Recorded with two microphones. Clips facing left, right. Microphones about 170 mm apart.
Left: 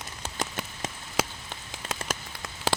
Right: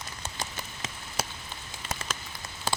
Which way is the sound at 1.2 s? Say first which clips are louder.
Left 6 dB; 90° left.